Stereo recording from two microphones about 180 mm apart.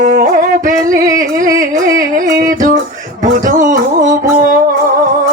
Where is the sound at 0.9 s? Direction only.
45° right (ahead or behind).